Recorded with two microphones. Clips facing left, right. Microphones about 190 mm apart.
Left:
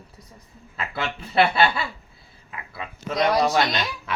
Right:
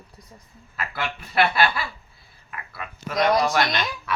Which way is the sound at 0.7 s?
30° left (ahead or behind).